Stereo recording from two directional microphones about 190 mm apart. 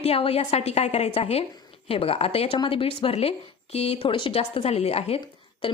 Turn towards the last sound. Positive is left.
turn(degrees=30)  # may be behind; listen again after turning